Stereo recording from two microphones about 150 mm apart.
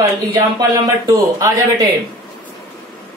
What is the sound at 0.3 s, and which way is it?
Speech, 20° right (ahead or behind).